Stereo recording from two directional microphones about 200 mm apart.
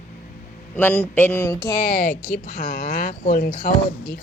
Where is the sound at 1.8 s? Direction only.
45° left (ahead or behind).